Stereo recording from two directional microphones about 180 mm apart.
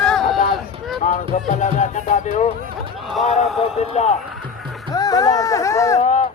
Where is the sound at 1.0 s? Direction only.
40° left (ahead or behind).